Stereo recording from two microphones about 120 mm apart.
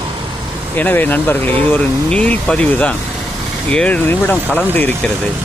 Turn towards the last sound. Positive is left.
turn(degrees=15)  # may be behind; listen again after turning